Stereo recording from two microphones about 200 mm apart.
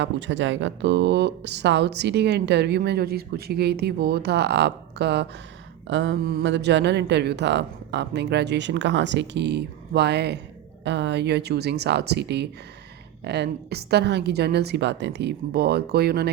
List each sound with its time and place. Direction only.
0.0 s speech: 65° right (ahead or behind)